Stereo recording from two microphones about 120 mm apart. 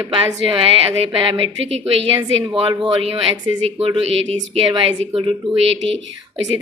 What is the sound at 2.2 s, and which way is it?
Speech, 35° right (ahead or behind).